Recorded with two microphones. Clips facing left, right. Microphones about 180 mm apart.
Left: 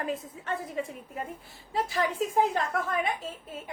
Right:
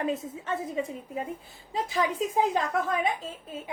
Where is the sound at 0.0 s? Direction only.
20° right (ahead or behind).